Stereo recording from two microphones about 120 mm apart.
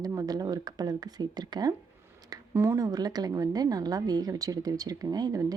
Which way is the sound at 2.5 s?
20° right (ahead or behind).